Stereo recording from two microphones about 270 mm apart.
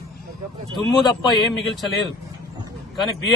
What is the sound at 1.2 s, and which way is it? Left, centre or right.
Speech, centre.